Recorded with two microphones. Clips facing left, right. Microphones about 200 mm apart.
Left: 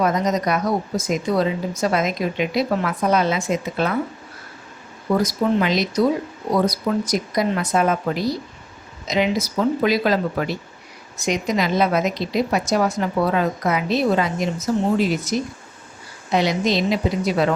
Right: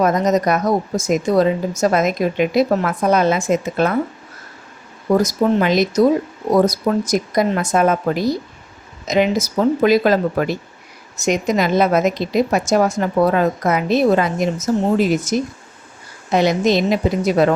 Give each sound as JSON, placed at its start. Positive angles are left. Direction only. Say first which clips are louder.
{"t": 0.0, "sound": "a woman's voice", "louder": "right 4 dB", "side_deg": -50}
{"t": 5.1, "sound": "a woman's voice", "louder": "right 4 dB", "side_deg": -45}